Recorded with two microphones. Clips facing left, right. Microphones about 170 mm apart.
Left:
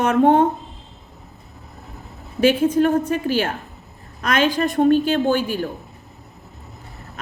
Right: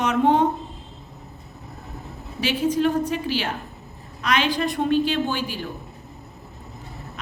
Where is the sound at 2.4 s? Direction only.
50° left (ahead or behind).